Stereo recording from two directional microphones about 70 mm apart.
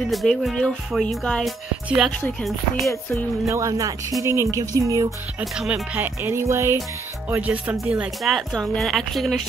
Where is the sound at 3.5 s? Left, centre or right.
Right.